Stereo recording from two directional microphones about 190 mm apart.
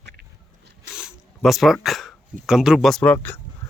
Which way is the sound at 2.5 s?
Centre (ahead or behind).